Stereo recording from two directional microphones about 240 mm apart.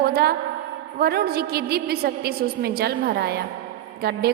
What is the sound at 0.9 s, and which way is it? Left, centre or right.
A woman's voice, right.